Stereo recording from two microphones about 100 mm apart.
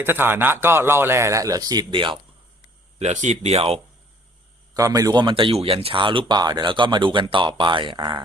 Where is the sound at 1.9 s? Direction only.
55° right (ahead or behind).